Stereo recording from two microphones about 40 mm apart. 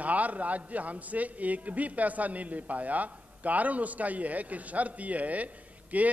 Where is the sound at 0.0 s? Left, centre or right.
Right.